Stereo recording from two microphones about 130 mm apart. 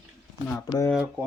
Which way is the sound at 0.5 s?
25° left (ahead or behind).